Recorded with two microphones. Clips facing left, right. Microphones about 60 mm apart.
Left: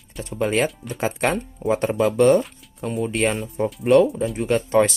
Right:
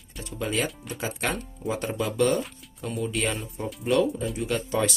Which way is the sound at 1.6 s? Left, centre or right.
Left.